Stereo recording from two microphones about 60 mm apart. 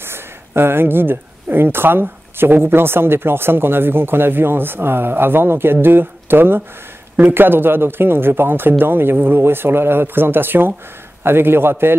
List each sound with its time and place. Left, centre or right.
0.0 s speech: right